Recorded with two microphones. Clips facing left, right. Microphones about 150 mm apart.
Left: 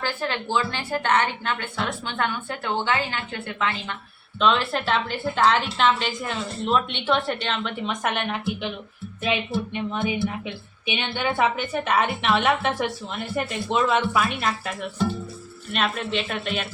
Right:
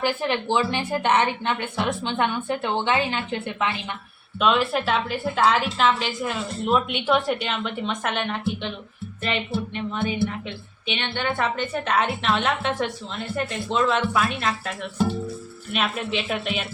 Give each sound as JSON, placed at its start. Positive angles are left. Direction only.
{"t": 0.0, "sound": "a woman's voice", "side_deg": -20}
{"t": 4.4, "sound": "a woman's voice", "side_deg": -10}